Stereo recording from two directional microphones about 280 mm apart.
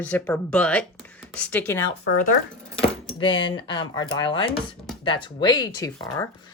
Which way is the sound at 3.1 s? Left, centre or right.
Centre.